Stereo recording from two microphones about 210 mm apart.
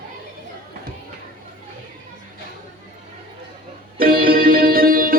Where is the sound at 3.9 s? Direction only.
45° right (ahead or behind).